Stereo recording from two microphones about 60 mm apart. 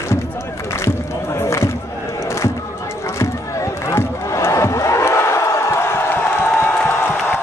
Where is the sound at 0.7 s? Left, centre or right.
Left.